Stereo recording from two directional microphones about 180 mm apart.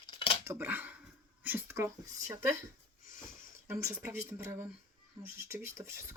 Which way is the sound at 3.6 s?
10° right (ahead or behind).